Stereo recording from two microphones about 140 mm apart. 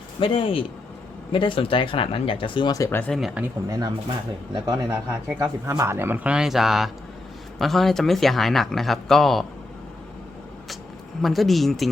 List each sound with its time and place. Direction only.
0.2 s speech: 40° left (ahead or behind)
3.0 s speech: centre (ahead or behind)
3.7 s speech: 30° right (ahead or behind)
4.9 s speech: 15° right (ahead or behind); by 9.4 s centre (ahead or behind)
11.2 s speech: centre (ahead or behind)